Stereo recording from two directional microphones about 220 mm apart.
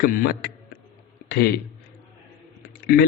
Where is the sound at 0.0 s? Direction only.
40° left (ahead or behind).